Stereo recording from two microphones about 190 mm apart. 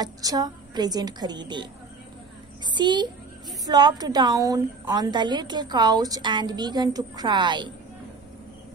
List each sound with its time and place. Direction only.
0.0 s a woman's voice: 20° right (ahead or behind)